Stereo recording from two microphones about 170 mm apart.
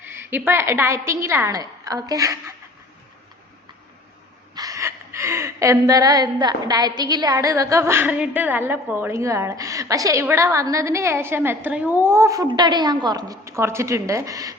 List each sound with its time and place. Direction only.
0.1 s a woman's voice: 15° right (ahead or behind)
4.5 s a woman's voice: 20° right (ahead or behind)